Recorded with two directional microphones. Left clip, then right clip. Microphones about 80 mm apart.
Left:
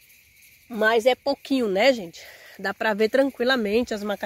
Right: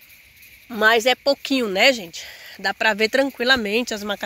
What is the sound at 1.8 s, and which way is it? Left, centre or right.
Speech, left.